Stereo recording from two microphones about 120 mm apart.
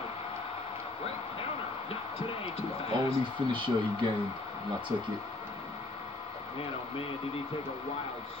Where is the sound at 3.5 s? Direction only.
45° right (ahead or behind).